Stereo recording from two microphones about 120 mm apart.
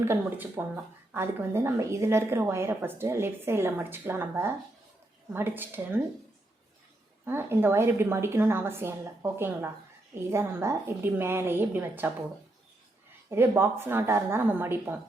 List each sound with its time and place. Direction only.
0.0 s a woman's voice: 20° right (ahead or behind)
7.3 s a woman's voice: 20° right (ahead or behind)
13.3 s a woman's voice: 20° right (ahead or behind)